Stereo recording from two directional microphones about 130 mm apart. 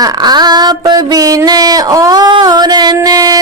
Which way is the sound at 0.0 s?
30° right (ahead or behind).